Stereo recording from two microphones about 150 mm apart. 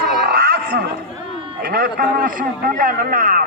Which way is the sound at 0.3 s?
90° right.